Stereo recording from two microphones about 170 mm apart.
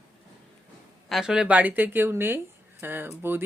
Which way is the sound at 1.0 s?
Centre (ahead or behind).